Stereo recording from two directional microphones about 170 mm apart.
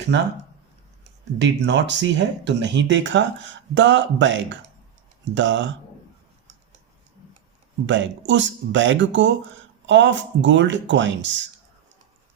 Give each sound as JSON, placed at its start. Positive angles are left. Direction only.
{"t": 1.4, "sound": "speech", "side_deg": -90}
{"t": 7.9, "sound": "speech", "side_deg": -90}